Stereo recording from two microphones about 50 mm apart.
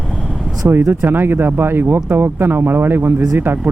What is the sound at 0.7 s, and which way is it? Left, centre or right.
Speech, right.